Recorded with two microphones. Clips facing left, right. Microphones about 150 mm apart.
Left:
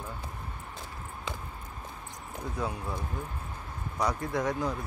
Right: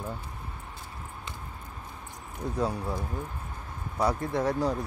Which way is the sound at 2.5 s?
35° right (ahead or behind).